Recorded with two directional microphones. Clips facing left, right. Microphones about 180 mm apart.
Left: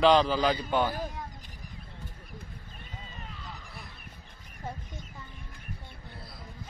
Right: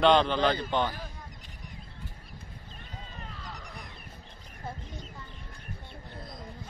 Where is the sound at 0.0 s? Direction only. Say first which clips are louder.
Even; 5° left (ahead or behind).